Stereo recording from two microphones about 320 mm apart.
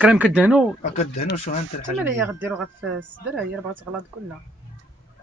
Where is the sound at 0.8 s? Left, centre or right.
Left.